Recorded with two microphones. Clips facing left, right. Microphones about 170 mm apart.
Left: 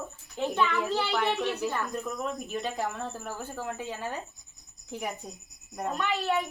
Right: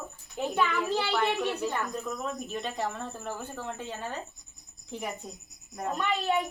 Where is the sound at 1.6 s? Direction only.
5° left (ahead or behind).